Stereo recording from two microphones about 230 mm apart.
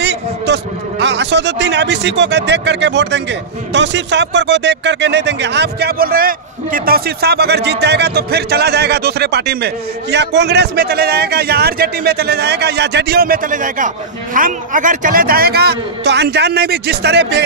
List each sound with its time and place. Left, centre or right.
0.0 s a man's voice: right